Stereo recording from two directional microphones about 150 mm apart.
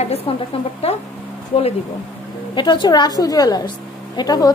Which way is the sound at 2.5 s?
30° left (ahead or behind).